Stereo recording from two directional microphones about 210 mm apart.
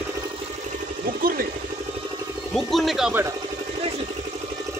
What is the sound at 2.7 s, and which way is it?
Speech, centre (ahead or behind).